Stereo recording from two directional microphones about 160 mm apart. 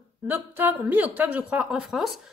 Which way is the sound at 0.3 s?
10° right (ahead or behind).